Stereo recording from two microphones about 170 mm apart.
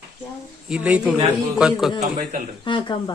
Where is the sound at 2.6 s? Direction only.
30° left (ahead or behind).